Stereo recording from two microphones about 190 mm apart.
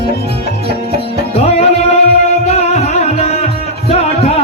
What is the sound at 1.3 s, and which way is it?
Music, 35° left (ahead or behind).